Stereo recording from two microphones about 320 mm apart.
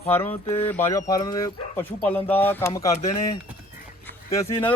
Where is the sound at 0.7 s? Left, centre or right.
Centre.